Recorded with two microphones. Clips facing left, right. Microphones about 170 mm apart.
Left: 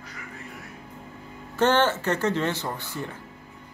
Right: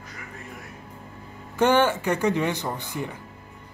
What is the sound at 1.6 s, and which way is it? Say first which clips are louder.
Speech: right 2 dB; 10° right (ahead or behind).